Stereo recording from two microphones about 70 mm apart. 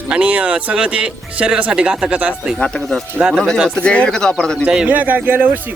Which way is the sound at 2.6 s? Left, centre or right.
Centre.